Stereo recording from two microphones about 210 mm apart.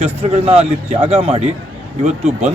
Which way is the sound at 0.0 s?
30° right (ahead or behind).